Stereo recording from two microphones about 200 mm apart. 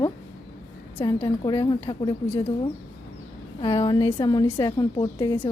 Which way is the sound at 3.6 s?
25° left (ahead or behind).